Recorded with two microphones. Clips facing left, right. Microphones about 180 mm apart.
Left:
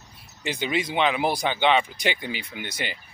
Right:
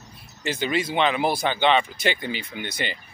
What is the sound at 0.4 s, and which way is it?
Speech, 15° left (ahead or behind).